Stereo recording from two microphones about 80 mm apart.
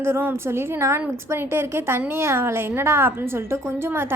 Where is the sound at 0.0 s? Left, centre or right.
Right.